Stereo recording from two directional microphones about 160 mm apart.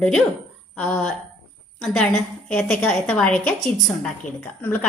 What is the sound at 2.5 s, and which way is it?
A woman's voice, 5° left (ahead or behind).